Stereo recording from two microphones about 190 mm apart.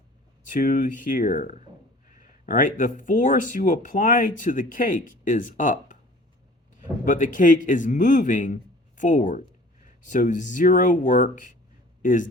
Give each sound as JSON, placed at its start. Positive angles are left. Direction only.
{"t": 0.4, "sound": "speech", "side_deg": 45}
{"t": 7.0, "sound": "speech", "side_deg": 40}